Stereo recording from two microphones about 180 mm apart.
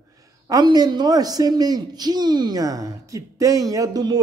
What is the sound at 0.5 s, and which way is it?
Speech, 20° right (ahead or behind).